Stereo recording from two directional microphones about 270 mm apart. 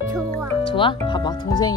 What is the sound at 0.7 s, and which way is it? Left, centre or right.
Speech, centre.